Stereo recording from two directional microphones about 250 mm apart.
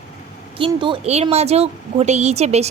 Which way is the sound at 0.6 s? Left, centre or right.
Centre.